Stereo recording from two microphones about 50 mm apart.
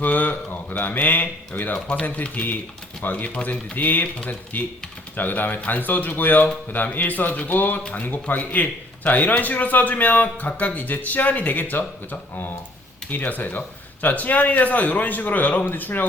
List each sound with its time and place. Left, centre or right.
0.0 s a man's voice: left
13.1 s a man's voice: left